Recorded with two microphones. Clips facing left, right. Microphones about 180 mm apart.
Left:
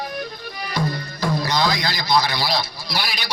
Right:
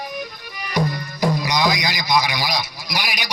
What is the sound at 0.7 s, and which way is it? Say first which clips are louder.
Music: right 3 dB; 15° right (ahead or behind).